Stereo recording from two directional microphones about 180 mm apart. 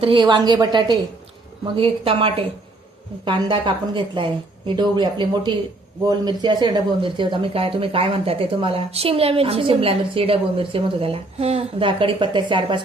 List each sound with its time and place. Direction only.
0.0 s speech: 25° right (ahead or behind)